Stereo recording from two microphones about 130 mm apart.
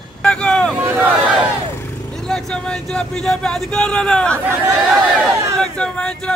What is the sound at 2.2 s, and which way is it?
Speech, 5° left (ahead or behind).